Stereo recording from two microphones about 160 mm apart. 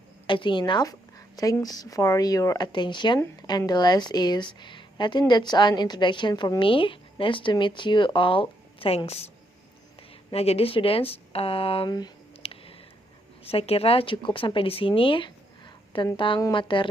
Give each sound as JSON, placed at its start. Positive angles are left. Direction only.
{"t": 0.3, "sound": "a woman's voice", "side_deg": 30}
{"t": 10.3, "sound": "speech", "side_deg": 40}
{"t": 12.4, "sound": "a sound", "side_deg": 35}
{"t": 13.4, "sound": "speech", "side_deg": 35}